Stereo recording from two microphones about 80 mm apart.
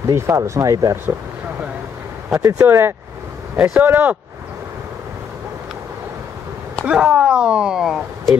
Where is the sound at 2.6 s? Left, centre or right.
Right.